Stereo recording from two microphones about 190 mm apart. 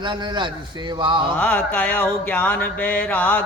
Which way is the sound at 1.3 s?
5° left (ahead or behind).